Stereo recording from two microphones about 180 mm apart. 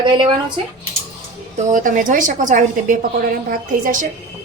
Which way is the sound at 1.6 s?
45° right (ahead or behind).